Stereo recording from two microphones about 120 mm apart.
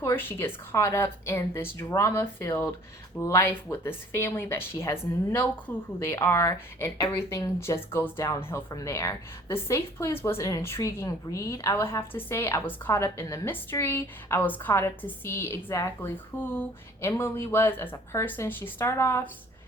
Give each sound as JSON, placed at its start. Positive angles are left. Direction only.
{"t": 0.0, "sound": "a woman's voice", "side_deg": 20}